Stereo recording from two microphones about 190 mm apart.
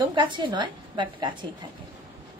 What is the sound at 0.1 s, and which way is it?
A woman's voice, 25° right (ahead or behind).